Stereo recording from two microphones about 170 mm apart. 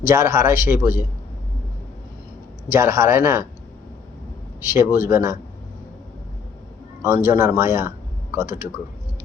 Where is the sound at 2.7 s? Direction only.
15° right (ahead or behind).